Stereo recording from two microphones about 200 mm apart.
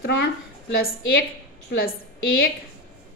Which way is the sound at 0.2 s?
55° left (ahead or behind).